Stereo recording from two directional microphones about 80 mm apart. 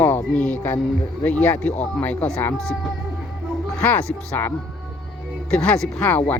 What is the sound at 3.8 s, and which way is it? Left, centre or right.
Speech, centre.